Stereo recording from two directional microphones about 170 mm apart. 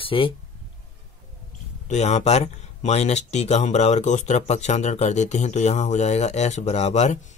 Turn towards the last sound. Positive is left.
turn(degrees=45)  # may be behind; listen again after turning